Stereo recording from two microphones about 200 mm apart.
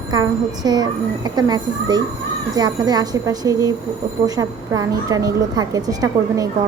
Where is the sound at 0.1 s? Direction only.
20° right (ahead or behind).